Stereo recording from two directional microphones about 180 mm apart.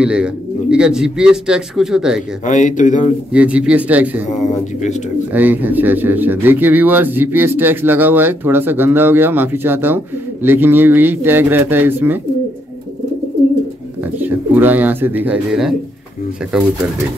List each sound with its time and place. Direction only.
0.0 s speech: 5° right (ahead or behind)
2.4 s speech: 45° left (ahead or behind)
3.3 s speech: 5° right (ahead or behind)
5.3 s speech: 10° right (ahead or behind)
14.1 s speech: 10° right (ahead or behind)